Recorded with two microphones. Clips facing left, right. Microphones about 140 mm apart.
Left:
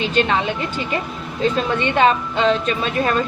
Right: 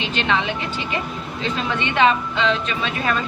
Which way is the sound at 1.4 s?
40° left (ahead or behind).